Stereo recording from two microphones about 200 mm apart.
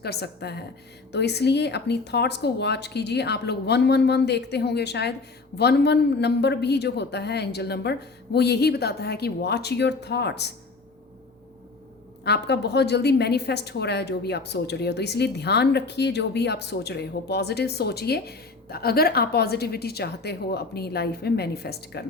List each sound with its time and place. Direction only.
0.0 s a woman's voice: 55° left (ahead or behind)
12.2 s a woman's voice: 55° left (ahead or behind)